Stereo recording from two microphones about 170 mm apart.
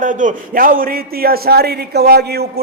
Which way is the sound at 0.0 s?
50° right (ahead or behind).